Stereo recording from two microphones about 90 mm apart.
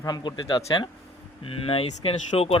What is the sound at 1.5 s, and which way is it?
Speech, 90° left.